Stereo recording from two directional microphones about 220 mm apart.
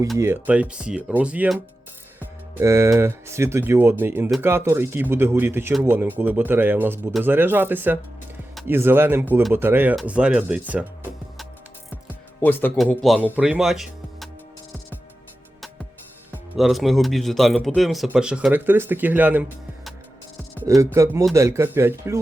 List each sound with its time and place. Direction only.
0.2 s speech: 10° right (ahead or behind)
12.0 s speech: 10° left (ahead or behind)
16.6 s speech: centre (ahead or behind)